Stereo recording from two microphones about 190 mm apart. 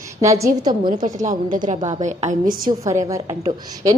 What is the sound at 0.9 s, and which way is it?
Speech, 40° right (ahead or behind).